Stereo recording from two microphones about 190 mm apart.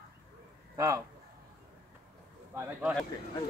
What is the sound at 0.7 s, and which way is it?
Speech, 15° right (ahead or behind).